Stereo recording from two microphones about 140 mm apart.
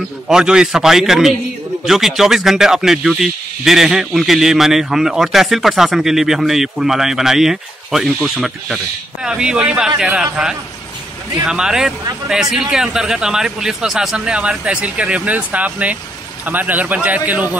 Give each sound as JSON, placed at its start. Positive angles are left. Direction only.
{"t": 0.3, "sound": "a man's voice", "side_deg": -5}